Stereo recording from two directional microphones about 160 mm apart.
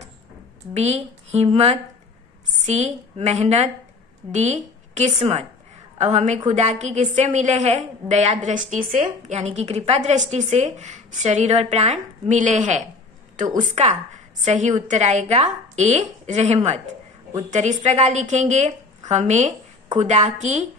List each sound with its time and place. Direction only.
0.7 s a woman's voice: 40° right (ahead or behind)